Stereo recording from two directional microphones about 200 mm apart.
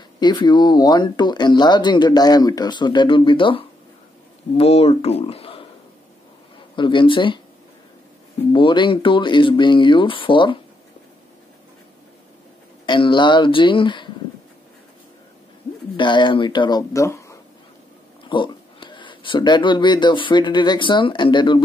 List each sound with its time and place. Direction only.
0.2 s speech: 20° left (ahead or behind)
6.7 s speech: 25° left (ahead or behind)
8.5 s speech: 25° left (ahead or behind)
12.8 s speech: 25° left (ahead or behind)
16.0 s speech: 25° left (ahead or behind)